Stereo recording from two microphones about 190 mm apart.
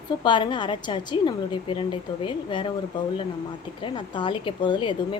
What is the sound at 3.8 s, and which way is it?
A woman's voice, 25° left (ahead or behind).